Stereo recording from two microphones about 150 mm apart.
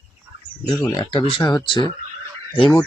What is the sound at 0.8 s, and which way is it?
Speech, 20° left (ahead or behind).